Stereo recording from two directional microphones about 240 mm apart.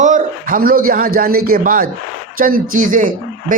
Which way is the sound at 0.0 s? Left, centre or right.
Right.